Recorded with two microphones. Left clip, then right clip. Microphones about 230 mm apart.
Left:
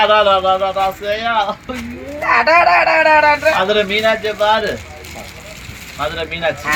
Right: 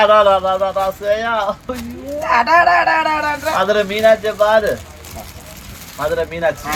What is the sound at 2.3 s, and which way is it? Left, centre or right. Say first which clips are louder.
Speech: left 1 dB; left.